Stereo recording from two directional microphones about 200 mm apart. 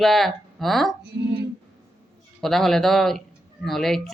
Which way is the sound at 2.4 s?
Centre (ahead or behind).